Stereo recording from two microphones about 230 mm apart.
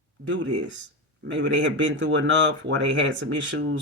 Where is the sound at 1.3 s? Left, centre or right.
Right.